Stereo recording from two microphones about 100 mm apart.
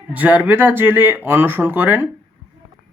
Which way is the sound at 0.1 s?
15° right (ahead or behind).